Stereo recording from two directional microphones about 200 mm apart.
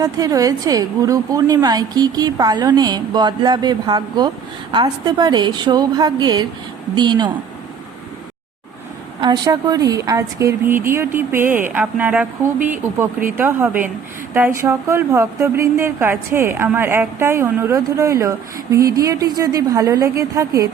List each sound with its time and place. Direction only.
0.0 s a woman's voice: 20° right (ahead or behind)
9.2 s a woman's voice: 20° right (ahead or behind)